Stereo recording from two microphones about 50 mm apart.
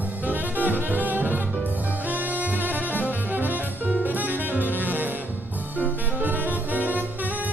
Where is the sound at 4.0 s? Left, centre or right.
Right.